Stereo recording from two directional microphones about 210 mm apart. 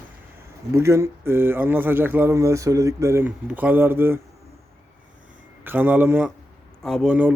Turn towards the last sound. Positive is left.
turn(degrees=-5)  # may be behind; listen again after turning